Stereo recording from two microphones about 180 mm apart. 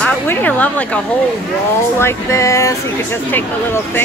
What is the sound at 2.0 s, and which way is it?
Speech, 15° left (ahead or behind).